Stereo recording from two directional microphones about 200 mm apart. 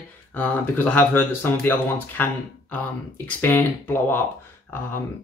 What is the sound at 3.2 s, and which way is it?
Speech, 10° left (ahead or behind).